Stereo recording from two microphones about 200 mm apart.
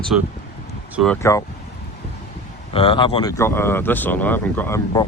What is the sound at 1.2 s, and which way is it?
Speech, 15° left (ahead or behind).